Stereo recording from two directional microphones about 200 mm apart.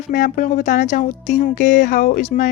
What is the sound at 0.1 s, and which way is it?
Speech, 40° left (ahead or behind).